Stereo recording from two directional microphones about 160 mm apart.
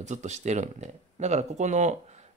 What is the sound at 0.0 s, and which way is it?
Speech, 45° right (ahead or behind).